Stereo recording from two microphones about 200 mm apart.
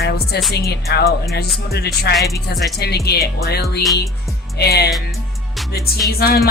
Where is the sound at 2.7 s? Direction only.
55° left (ahead or behind).